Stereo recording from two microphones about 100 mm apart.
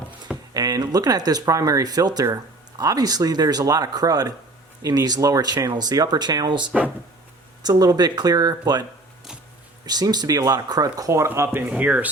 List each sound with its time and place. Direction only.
0.5 s speech: 40° right (ahead or behind)
9.8 s speech: 45° right (ahead or behind); by 12.0 s 15° right (ahead or behind)